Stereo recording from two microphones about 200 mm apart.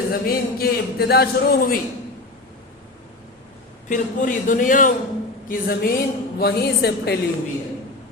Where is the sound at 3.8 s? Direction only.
40° left (ahead or behind).